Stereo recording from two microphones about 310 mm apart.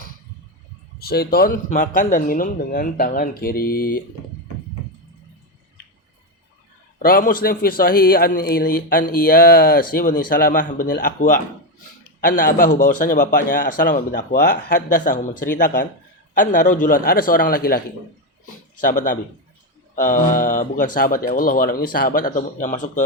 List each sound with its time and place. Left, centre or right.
0.9 s speech: left
7.0 s speech: left